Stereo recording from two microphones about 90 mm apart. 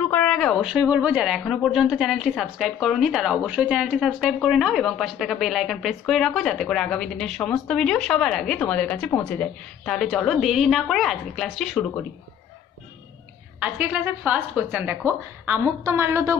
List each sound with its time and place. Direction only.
0.1 s a sound: 10° left (ahead or behind)
0.7 s a woman's voice: 10° right (ahead or behind); by 9.9 s 15° left (ahead or behind)
9.9 s speech: 5° left (ahead or behind)
13.6 s a woman's voice: 15° right (ahead or behind)